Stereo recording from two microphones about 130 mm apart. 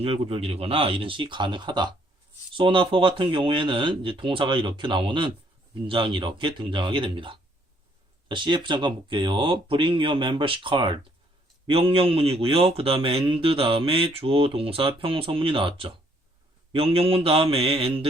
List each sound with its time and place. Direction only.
0.0 s a man's voice: 50° right (ahead or behind)